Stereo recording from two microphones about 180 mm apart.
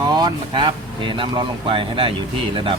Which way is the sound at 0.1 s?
25° right (ahead or behind).